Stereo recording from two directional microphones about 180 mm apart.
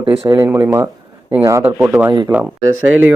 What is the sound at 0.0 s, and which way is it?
Speech, 35° right (ahead or behind).